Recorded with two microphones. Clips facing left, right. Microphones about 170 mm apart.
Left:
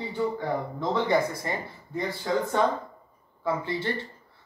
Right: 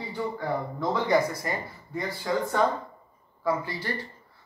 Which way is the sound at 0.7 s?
25° left (ahead or behind).